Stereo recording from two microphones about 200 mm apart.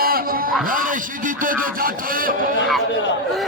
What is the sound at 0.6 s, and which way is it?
Speech, 45° right (ahead or behind).